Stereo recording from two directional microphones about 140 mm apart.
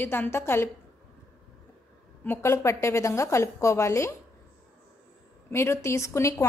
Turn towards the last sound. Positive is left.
turn(degrees=20)  # may be behind; listen again after turning